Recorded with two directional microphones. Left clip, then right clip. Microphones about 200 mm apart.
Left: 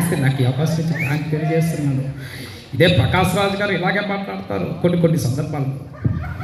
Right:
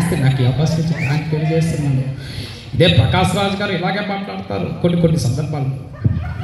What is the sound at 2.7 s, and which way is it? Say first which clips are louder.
Speech: right 1 dB; 45° right (ahead or behind).